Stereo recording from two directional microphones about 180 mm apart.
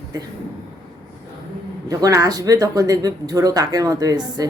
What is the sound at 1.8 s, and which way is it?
Speech, 20° right (ahead or behind).